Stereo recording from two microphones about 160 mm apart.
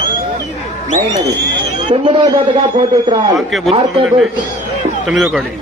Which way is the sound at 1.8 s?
35° right (ahead or behind).